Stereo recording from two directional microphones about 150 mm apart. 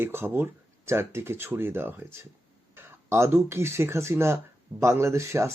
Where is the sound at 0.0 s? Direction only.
15° right (ahead or behind).